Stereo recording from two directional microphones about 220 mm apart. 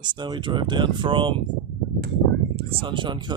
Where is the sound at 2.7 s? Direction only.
25° right (ahead or behind).